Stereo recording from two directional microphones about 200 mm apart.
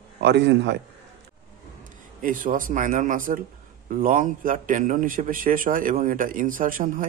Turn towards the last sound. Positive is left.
turn(degrees=-45)  # may be behind; listen again after turning